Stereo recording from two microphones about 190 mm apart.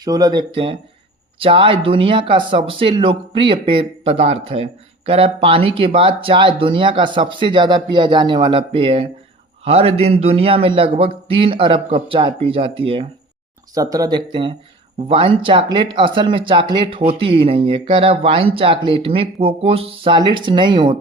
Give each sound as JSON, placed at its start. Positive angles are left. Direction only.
{"t": 0.0, "sound": "speech", "side_deg": -20}